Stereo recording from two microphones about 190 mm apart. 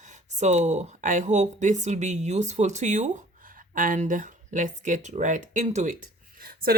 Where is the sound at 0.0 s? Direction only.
40° right (ahead or behind).